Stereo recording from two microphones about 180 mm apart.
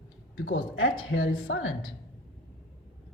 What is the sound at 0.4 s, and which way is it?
Speech, 90° left.